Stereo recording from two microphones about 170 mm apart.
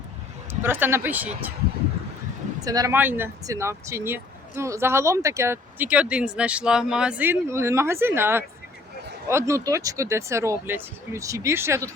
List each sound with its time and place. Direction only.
0.6 s speech: 15° right (ahead or behind)
2.6 s speech: 20° right (ahead or behind)